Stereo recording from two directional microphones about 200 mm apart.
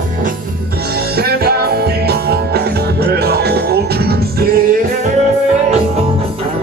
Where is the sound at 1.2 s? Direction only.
50° right (ahead or behind).